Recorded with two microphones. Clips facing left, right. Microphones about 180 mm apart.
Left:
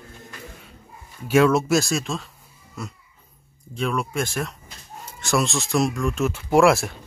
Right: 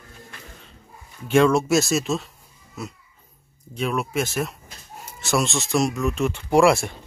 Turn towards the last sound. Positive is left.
turn(degrees=0)  # may be behind; listen again after turning